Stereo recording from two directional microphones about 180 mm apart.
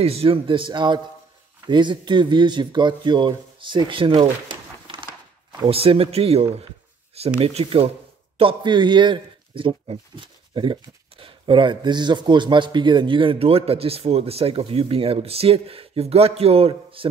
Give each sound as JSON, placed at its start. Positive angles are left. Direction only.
{"t": 0.0, "sound": "speech", "side_deg": -30}